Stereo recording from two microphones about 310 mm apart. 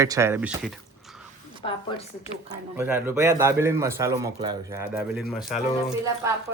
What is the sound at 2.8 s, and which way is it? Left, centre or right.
Speech, centre.